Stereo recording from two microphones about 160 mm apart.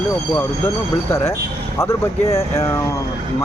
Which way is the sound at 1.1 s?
15° left (ahead or behind).